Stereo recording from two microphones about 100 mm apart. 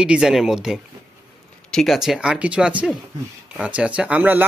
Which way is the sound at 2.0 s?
5° right (ahead or behind).